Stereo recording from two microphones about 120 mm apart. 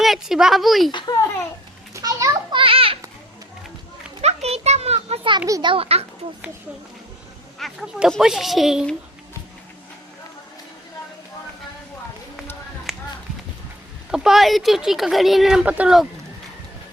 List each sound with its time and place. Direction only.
0.0 s speech: 5° right (ahead or behind)
0.9 s a child's voice: 40° left (ahead or behind)
1.9 s children playing: 30° right (ahead or behind)
2.5 s children playing: 45° right (ahead or behind)
4.2 s a sound: 60° right (ahead or behind)
5.6 s a child's voice: 50° right (ahead or behind)
7.6 s speech: centre (ahead or behind)
12.9 s a sound: centre (ahead or behind)
14.1 s speech: 5° right (ahead or behind)